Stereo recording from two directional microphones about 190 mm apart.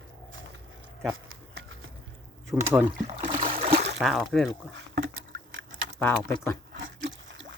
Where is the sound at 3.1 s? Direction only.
25° right (ahead or behind).